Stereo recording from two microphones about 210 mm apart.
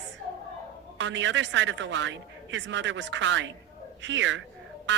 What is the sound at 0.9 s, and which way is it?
A woman's voice, 60° right (ahead or behind).